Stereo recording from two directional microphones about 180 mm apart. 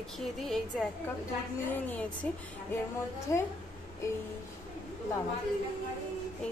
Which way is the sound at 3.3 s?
15° left (ahead or behind).